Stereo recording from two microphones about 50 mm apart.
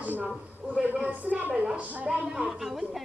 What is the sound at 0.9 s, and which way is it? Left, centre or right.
Speech, right.